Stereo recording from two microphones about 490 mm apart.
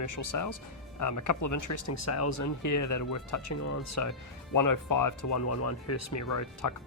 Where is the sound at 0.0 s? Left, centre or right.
Left.